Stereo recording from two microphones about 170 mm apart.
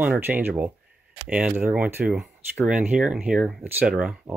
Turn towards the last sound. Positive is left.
turn(degrees=-5)  # may be behind; listen again after turning